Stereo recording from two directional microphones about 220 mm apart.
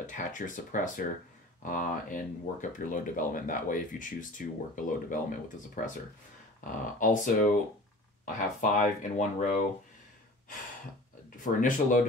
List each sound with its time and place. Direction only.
0.0 s speech: 35° left (ahead or behind)
8.4 s speech: 35° left (ahead or behind)
11.4 s speech: 35° left (ahead or behind)